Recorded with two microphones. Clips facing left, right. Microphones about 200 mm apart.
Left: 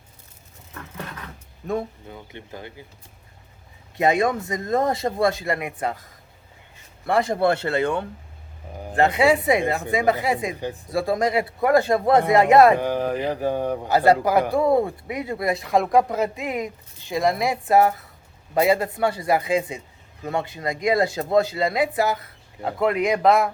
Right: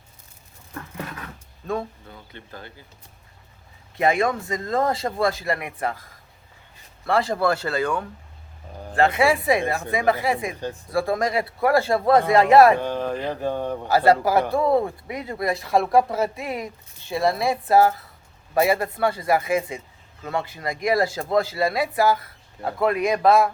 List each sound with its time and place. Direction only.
1.6 s speech: 20° left (ahead or behind)
3.9 s a woman's voice: 20° left (ahead or behind)